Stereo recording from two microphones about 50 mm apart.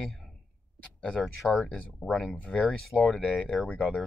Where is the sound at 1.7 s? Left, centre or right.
Left.